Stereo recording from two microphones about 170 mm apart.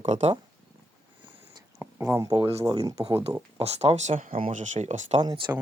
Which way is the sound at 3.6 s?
40° right (ahead or behind).